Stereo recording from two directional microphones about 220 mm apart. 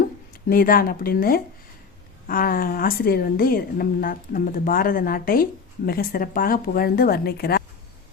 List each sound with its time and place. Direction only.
0.5 s a woman's voice: 40° left (ahead or behind)